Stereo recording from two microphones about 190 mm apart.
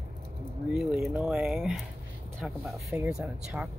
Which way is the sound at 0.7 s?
Centre (ahead or behind).